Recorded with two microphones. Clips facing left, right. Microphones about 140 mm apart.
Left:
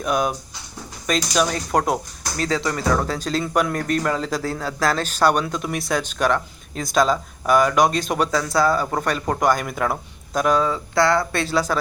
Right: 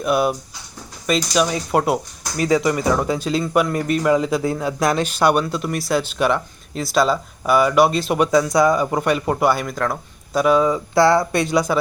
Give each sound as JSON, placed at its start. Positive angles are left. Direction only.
{"t": 0.0, "sound": "a man's voice", "side_deg": -5}
{"t": 9.6, "sound": "speech", "side_deg": 5}
{"t": 10.9, "sound": "speech", "side_deg": -25}
{"t": 11.7, "sound": "speech", "side_deg": -10}